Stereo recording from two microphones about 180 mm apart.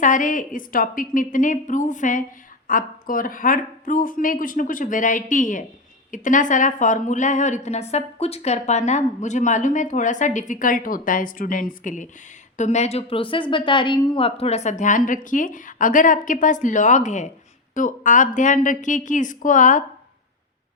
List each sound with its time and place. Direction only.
0.0 s a woman's voice: 45° left (ahead or behind)